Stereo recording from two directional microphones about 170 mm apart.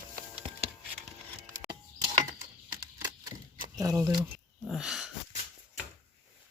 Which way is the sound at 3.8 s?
20° right (ahead or behind).